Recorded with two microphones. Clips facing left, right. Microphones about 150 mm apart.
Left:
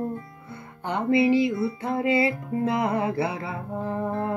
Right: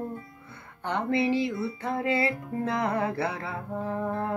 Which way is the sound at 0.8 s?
10° left (ahead or behind).